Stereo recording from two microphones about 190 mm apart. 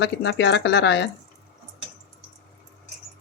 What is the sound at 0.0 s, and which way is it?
Speech, 65° left (ahead or behind).